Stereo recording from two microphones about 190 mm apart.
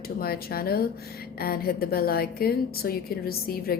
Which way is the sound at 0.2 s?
55° left (ahead or behind).